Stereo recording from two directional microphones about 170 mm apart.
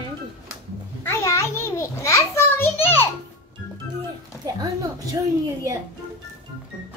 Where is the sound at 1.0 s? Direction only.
15° left (ahead or behind).